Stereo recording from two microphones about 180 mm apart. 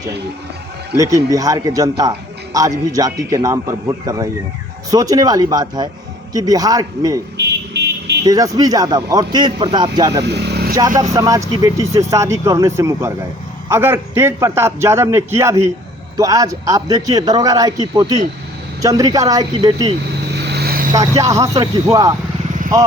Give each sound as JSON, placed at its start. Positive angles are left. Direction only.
{"t": 0.9, "sound": "a man's voice", "side_deg": -20}
{"t": 7.3, "sound": "vehicle", "side_deg": -70}
{"t": 8.2, "sound": "a man's voice", "side_deg": -20}
{"t": 10.2, "sound": "vehicle", "side_deg": -65}
{"t": 10.8, "sound": "a man's voice", "side_deg": -20}
{"t": 20.3, "sound": "vehicle", "side_deg": -65}
{"t": 20.9, "sound": "a man's voice", "side_deg": -20}